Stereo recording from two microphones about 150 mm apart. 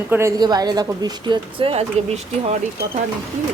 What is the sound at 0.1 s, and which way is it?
Speech, 20° right (ahead or behind).